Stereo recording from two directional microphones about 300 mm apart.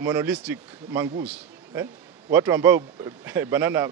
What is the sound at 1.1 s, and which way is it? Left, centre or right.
Speech, right.